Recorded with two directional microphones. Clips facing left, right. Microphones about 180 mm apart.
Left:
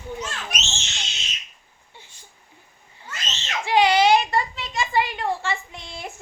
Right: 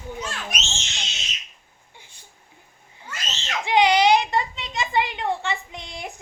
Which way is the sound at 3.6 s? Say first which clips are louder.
Even; 20° right (ahead or behind).